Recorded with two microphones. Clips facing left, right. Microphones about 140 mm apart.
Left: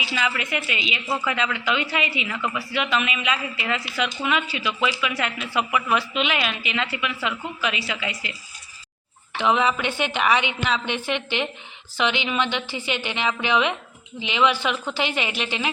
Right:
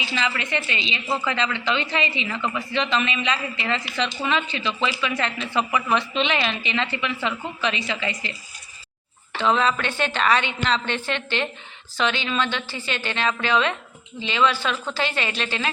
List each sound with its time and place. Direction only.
0.0 s a woman's voice: 10° left (ahead or behind)
9.4 s a woman's voice: 15° left (ahead or behind)